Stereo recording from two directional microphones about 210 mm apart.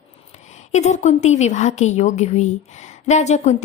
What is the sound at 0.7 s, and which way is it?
A woman's voice, 35° left (ahead or behind).